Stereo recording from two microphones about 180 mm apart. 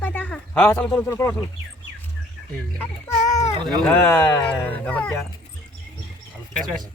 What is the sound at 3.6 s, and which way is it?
Speech, 10° left (ahead or behind).